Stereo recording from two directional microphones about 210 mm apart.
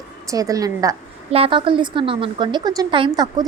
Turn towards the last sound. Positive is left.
turn(degrees=-20)  # may be behind; listen again after turning